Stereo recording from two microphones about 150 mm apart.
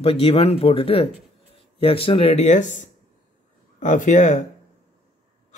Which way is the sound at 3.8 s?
55° left (ahead or behind).